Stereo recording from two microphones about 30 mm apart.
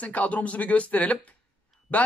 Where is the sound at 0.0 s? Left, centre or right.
Left.